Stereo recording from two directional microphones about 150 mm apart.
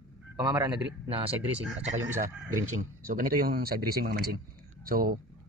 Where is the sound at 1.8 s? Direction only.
60° right (ahead or behind); by 4.3 s 90° right.